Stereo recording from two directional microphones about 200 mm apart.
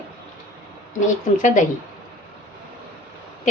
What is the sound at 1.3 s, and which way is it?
Speech, 40° left (ahead or behind).